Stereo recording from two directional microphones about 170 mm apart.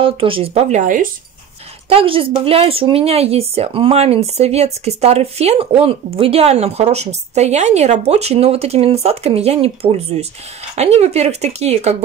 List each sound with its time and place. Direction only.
0.0 s speech: 30° right (ahead or behind); by 1.0 s 50° right (ahead or behind)
1.9 s speech: 35° right (ahead or behind)